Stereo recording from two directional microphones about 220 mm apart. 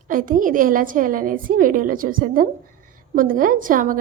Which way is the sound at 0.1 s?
40° right (ahead or behind).